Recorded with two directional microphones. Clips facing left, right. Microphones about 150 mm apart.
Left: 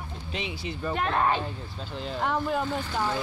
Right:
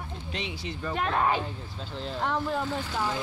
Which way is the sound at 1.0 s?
Centre (ahead or behind).